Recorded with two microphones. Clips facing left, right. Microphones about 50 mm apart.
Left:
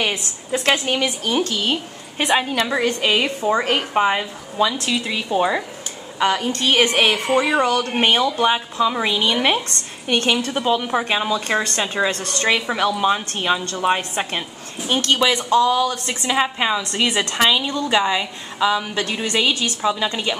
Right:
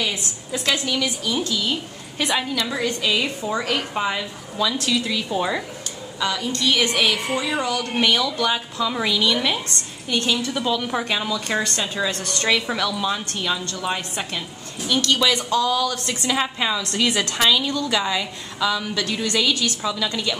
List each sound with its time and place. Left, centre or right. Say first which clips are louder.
0.5 s a woman's voice: left 4 dB; left
2.1 s a woman's voice: left 4 dB; left
6.1 s a woman's voice: left 5 dB; left
9.4 s a woman's voice: left 4 dB; left
10.5 s a woman's voice: left 3 dB; left
11.1 s a woman's voice: left 4 dB; left